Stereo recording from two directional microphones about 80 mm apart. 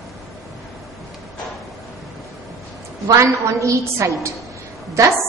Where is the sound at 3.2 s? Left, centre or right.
Right.